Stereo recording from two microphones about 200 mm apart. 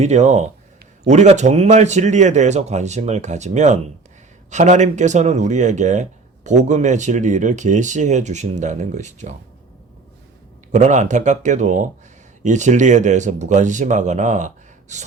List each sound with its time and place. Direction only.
0.0 s speech: 35° right (ahead or behind)
10.7 s speech: 35° right (ahead or behind)